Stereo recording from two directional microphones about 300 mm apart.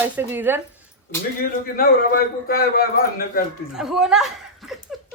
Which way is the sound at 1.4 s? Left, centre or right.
Left.